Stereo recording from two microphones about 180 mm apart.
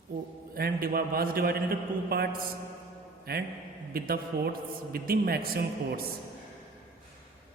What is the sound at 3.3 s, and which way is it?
A man's voice, 55° right (ahead or behind).